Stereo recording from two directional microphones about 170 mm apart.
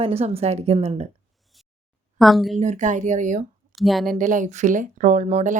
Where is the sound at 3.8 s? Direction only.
Centre (ahead or behind).